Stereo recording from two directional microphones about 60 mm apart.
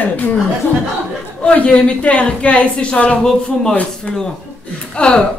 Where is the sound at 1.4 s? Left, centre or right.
Left.